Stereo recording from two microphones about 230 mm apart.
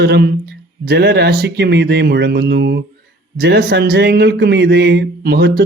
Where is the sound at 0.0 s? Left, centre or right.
Right.